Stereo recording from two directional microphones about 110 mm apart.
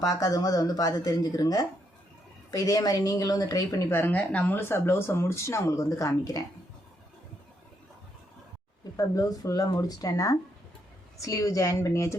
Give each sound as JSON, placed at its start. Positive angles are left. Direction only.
{"t": 0.0, "sound": "speech", "side_deg": 35}
{"t": 9.0, "sound": "speech", "side_deg": 35}